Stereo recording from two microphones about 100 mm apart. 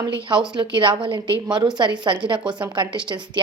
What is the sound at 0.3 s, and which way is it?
A woman's voice, 45° right (ahead or behind).